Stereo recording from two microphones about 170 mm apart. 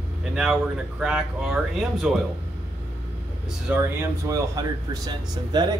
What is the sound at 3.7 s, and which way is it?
Speech, 10° right (ahead or behind).